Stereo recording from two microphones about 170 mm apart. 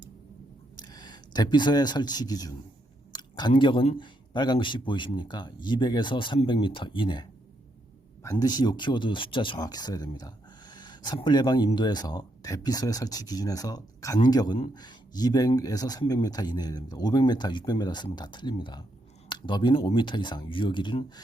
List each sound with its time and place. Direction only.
0.8 s speech: 25° left (ahead or behind)